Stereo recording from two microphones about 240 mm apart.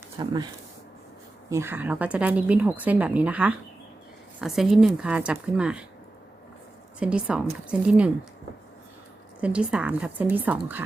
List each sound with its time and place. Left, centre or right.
0.2 s speech: centre
1.5 s speech: centre
7.0 s speech: centre
9.4 s speech: centre